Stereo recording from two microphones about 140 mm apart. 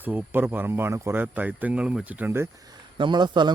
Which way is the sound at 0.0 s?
15° right (ahead or behind).